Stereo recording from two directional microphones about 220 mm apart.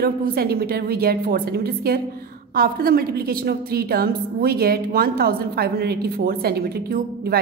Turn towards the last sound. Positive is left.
turn(degrees=-45)  # may be behind; listen again after turning